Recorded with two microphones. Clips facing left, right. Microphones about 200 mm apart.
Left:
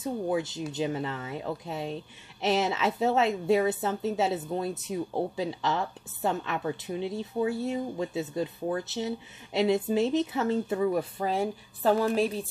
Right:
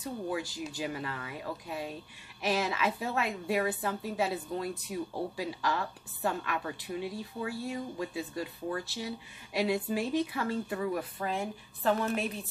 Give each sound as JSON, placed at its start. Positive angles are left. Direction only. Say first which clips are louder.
{"t": 0.0, "sound": "a woman's voice", "louder": "left 6 dB", "side_deg": 20}
{"t": 11.3, "sound": "a woman's voice", "louder": "left 6 dB", "side_deg": 35}